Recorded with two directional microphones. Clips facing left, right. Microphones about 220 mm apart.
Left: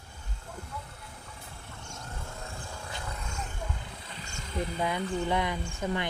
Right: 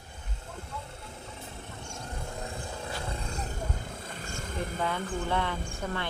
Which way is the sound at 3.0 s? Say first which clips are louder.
Right 3 dB; 30° right (ahead or behind).